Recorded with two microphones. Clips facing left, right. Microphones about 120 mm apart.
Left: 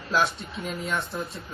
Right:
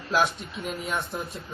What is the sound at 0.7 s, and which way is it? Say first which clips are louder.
Speech: even; 10° right (ahead or behind).